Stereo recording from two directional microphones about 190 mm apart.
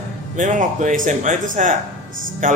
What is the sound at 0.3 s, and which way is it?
A man's voice, 40° right (ahead or behind).